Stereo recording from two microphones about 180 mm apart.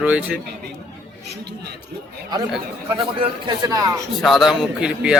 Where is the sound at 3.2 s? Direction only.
20° right (ahead or behind).